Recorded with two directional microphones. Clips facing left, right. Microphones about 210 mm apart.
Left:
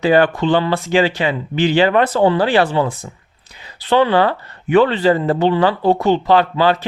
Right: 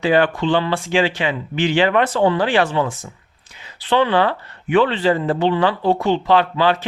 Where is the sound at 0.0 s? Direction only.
40° left (ahead or behind).